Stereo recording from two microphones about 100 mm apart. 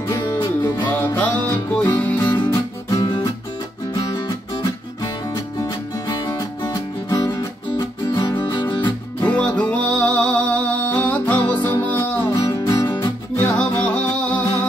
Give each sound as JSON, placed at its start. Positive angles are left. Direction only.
{"t": 0.1, "sound": "music", "side_deg": 45}
{"t": 1.0, "sound": "music", "side_deg": 20}
{"t": 2.2, "sound": "music", "side_deg": 40}
{"t": 6.0, "sound": "music", "side_deg": 45}
{"t": 9.3, "sound": "music", "side_deg": 15}
{"t": 12.4, "sound": "music", "side_deg": 40}
{"t": 13.4, "sound": "music", "side_deg": 15}